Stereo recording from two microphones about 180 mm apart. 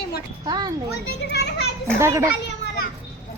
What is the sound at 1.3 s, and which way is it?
Speech, 65° left (ahead or behind).